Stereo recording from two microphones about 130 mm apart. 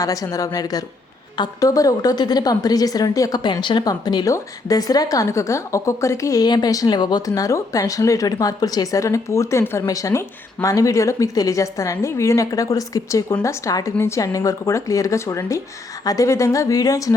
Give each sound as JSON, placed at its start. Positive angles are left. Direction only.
{"t": 0.0, "sound": "a woman's voice", "side_deg": 25}